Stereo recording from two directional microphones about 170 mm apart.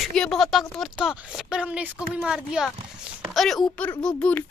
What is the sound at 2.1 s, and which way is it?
Speech, 5° right (ahead or behind).